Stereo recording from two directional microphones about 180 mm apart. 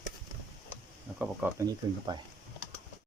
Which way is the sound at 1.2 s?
10° right (ahead or behind).